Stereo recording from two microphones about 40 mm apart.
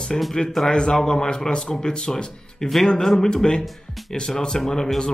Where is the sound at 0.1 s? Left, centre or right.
Centre.